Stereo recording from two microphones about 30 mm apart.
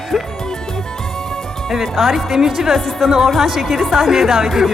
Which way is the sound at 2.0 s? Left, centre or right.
Centre.